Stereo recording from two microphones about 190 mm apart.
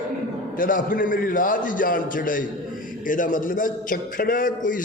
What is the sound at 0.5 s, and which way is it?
A man's voice, 45° left (ahead or behind).